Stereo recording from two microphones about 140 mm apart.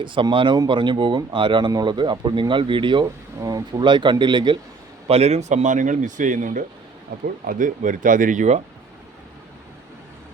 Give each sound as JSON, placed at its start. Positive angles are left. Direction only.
{"t": 0.0, "sound": "speech", "side_deg": -35}
{"t": 5.0, "sound": "speech", "side_deg": -45}